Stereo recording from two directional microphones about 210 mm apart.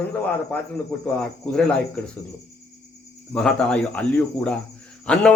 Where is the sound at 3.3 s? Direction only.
5° left (ahead or behind).